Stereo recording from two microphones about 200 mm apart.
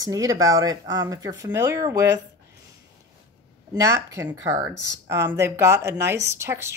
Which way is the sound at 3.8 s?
15° right (ahead or behind).